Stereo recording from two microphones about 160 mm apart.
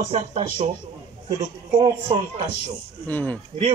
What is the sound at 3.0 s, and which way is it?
Speech, 10° left (ahead or behind).